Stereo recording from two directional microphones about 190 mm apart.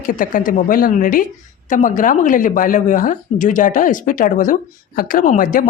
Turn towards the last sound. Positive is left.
turn(degrees=45)  # may be behind; listen again after turning